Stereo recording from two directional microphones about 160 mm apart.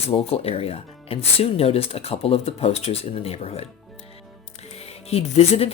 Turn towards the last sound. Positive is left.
turn(degrees=40)  # may be behind; listen again after turning